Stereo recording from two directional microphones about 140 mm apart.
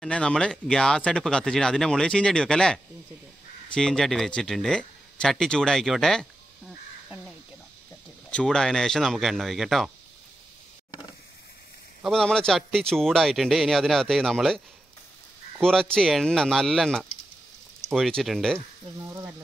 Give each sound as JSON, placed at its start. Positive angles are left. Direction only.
{"t": 0.0, "sound": "speech", "side_deg": 5}
{"t": 8.3, "sound": "speech", "side_deg": 5}
{"t": 12.0, "sound": "speech", "side_deg": 5}
{"t": 15.6, "sound": "speech", "side_deg": 5}
{"t": 19.0, "sound": "speech", "side_deg": -20}